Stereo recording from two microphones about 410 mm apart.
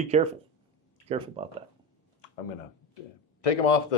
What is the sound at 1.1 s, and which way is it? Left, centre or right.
Speech, centre.